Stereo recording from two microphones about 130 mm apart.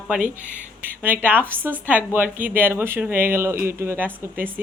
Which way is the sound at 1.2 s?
15° right (ahead or behind).